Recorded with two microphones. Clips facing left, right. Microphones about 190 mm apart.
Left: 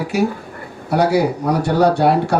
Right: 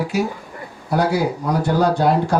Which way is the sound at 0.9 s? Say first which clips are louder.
Left 3 dB; 70° left (ahead or behind).